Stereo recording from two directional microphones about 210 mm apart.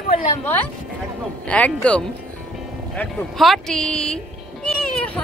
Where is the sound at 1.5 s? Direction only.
5° left (ahead or behind).